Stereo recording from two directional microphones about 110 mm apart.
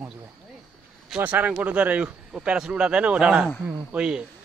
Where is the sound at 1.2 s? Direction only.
15° right (ahead or behind).